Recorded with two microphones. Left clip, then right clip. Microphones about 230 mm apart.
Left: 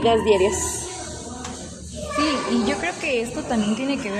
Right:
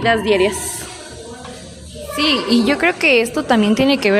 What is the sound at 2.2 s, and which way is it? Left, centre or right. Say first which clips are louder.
A woman's voice: right 6 dB; right.